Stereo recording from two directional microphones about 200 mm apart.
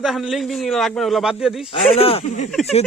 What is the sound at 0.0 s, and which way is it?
A man's voice, centre (ahead or behind).